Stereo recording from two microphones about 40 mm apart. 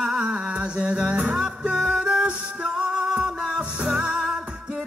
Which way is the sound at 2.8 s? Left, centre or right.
Centre.